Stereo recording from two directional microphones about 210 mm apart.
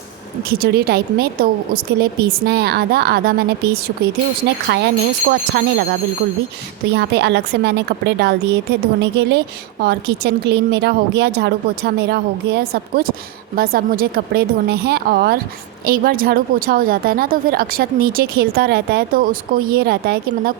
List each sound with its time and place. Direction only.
0.6 s a woman's voice: 50° right (ahead or behind)